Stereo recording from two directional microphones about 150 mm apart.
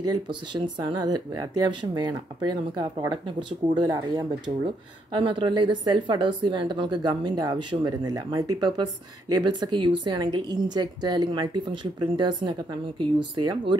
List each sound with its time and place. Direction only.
0.0 s speech: 30° right (ahead or behind)